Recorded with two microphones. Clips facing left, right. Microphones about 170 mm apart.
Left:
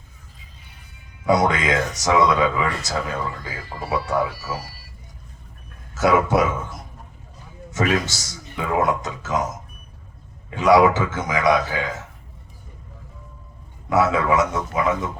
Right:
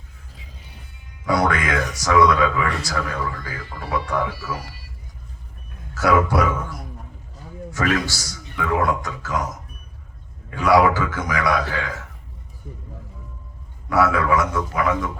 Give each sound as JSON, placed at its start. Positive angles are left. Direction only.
{"t": 1.3, "sound": "a man's voice", "side_deg": 20}
{"t": 5.9, "sound": "a man's voice", "side_deg": 20}
{"t": 10.5, "sound": "a man's voice", "side_deg": 20}
{"t": 13.9, "sound": "a man's voice", "side_deg": 20}